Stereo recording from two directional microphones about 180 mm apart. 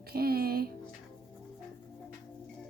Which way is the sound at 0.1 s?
60° right (ahead or behind).